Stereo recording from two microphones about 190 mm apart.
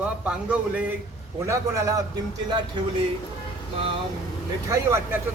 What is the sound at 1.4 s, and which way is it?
Speech, 15° right (ahead or behind).